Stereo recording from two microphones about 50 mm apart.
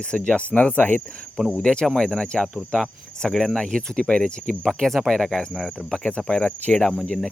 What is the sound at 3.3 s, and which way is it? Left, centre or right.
Speech, centre.